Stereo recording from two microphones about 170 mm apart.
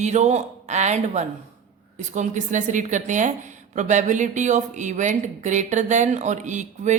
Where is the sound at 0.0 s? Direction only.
45° right (ahead or behind).